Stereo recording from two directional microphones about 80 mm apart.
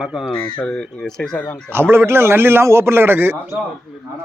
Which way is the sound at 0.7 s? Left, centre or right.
Centre.